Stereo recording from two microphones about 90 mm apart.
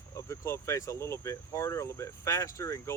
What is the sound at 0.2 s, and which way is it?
Speech, 30° left (ahead or behind).